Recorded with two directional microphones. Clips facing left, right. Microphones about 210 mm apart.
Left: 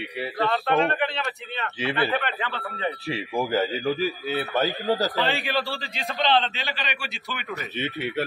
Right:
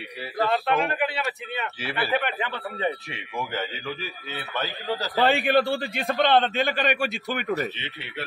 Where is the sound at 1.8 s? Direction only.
20° left (ahead or behind).